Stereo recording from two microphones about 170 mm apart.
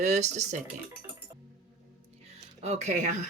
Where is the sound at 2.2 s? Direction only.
40° right (ahead or behind).